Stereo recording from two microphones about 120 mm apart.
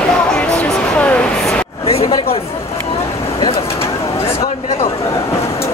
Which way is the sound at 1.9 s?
50° left (ahead or behind).